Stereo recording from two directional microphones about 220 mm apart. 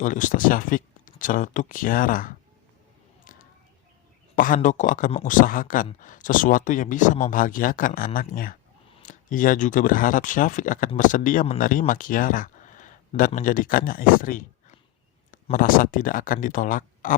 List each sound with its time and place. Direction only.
0.0 s speech: 35° left (ahead or behind)
4.4 s speech: 40° left (ahead or behind)